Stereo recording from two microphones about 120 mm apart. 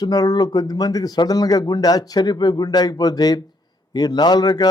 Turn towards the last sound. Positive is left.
turn(degrees=35)  # may be behind; listen again after turning